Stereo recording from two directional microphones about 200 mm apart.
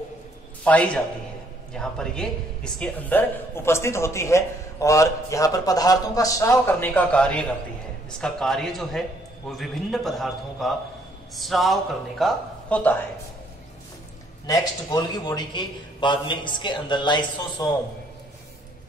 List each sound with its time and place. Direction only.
0.7 s speech: 5° left (ahead or behind)
14.4 s a man's voice: 20° left (ahead or behind)